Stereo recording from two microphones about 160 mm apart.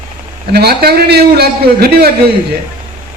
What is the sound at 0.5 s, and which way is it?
A man's voice, 75° right (ahead or behind).